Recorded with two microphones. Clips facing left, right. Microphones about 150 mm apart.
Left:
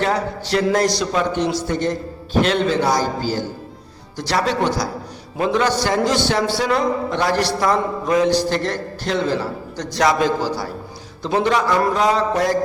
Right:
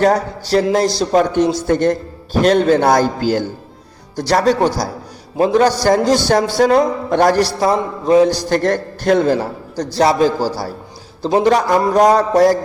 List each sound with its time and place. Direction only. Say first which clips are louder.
0.0 s a man's voice: right 6 dB; 40° right (ahead or behind); by 3.4 s 60° right (ahead or behind)
4.2 s a man's voice: right 6 dB; 40° right (ahead or behind)
7.6 s a man's voice: right 3 dB; 30° right (ahead or behind)
8.4 s a man's voice: right 6 dB; 50° right (ahead or behind)
9.8 s a man's voice: right 4 dB; 30° right (ahead or behind)